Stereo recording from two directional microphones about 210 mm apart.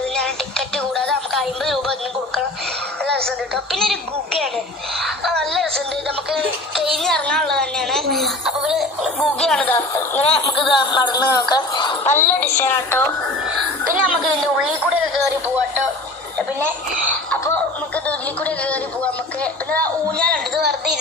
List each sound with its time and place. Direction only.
0.2 s music: 5° left (ahead or behind)
3.1 s a woman's voice: 5° left (ahead or behind)
5.0 s music: 5° left (ahead or behind)
7.0 s a woman's voice: 5° left (ahead or behind)
10.2 s speech: 25° left (ahead or behind)
12.0 s speech: 10° left (ahead or behind)
14.0 s a woman's voice: centre (ahead or behind)
17.4 s music: 10° left (ahead or behind)
18.4 s speech: 5° left (ahead or behind)